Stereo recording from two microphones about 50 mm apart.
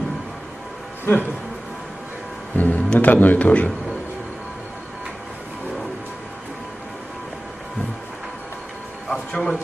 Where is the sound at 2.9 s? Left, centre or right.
Left.